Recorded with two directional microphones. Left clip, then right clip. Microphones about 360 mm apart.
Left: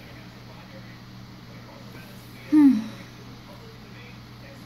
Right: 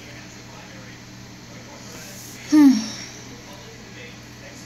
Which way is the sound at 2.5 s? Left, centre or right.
Right.